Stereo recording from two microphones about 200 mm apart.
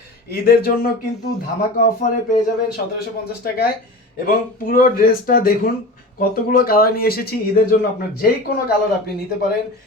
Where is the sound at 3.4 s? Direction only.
50° left (ahead or behind).